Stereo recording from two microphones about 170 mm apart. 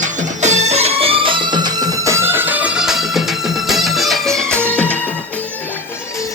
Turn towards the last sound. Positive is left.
turn(degrees=10)  # may be behind; listen again after turning